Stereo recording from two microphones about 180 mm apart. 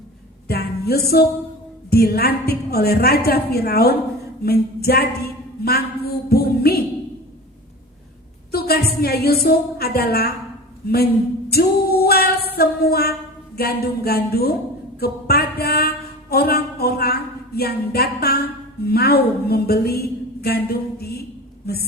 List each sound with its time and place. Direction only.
0.4 s music: 60° left (ahead or behind)
1.9 s a woman's voice: 60° left (ahead or behind)
8.5 s a sound: 60° left (ahead or behind)
9.0 s a woman's voice: 60° left (ahead or behind)
10.8 s female singing: 60° left (ahead or behind)
13.6 s a woman's voice: 60° left (ahead or behind)
14.9 s a sound: 60° left (ahead or behind)
19.5 s a woman's voice: 60° left (ahead or behind)